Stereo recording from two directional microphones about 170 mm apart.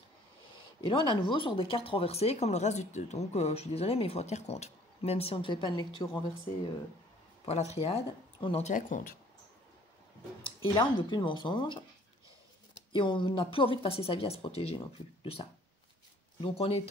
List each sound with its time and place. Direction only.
0.7 s speech: 30° left (ahead or behind)
7.7 s speech: 35° left (ahead or behind)
10.4 s speech: 30° left (ahead or behind)
12.9 s speech: 30° left (ahead or behind)
16.3 s speech: 35° left (ahead or behind)